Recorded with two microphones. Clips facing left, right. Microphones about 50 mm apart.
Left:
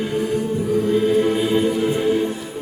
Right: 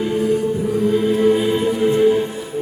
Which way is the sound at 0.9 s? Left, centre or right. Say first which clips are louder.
Right 3 dB; centre.